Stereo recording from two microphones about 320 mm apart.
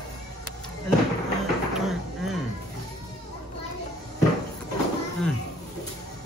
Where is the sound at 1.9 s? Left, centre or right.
Centre.